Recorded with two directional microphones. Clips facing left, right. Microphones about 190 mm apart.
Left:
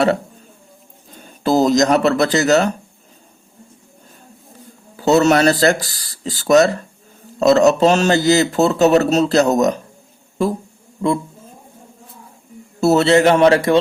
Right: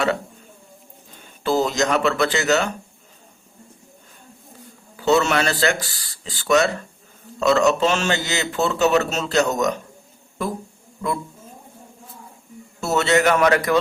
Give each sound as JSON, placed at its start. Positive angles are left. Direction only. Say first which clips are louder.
{"t": 1.5, "sound": "speech", "louder": "left 6 dB", "side_deg": 40}
{"t": 4.9, "sound": "a man's voice", "louder": "left 5 dB", "side_deg": 40}
{"t": 12.8, "sound": "a man's voice", "louder": "left 6 dB", "side_deg": 35}